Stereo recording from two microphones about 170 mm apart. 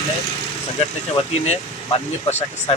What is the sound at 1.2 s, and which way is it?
Speech, 35° left (ahead or behind).